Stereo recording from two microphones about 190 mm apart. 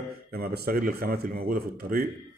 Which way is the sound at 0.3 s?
55° right (ahead or behind).